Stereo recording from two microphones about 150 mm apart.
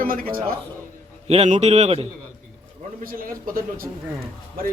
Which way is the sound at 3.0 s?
70° right (ahead or behind).